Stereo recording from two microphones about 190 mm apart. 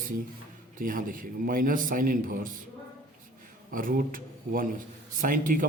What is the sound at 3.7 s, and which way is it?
A man's voice, 45° right (ahead or behind).